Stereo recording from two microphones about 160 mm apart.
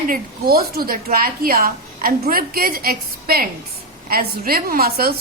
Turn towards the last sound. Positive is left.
turn(degrees=-70)  # may be behind; listen again after turning